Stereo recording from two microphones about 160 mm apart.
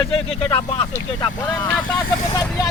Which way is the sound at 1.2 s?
25° left (ahead or behind).